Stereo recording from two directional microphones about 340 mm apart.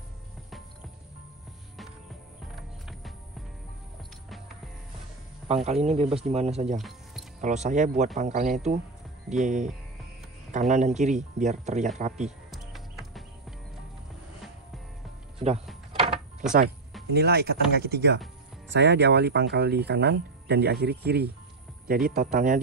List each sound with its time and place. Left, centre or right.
2.5 s music: centre
5.5 s speech: centre
9.3 s speech: centre
10.7 s speech: right
12.3 s music: centre
15.3 s music: centre
16.0 s a sound: centre
17.1 s speech: right